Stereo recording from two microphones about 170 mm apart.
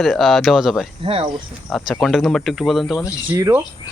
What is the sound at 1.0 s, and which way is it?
Speech, 35° right (ahead or behind).